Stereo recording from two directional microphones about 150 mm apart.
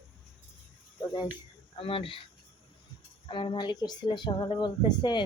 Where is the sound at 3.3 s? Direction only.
35° left (ahead or behind).